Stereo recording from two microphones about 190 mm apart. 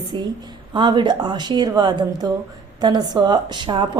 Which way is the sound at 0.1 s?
25° right (ahead or behind).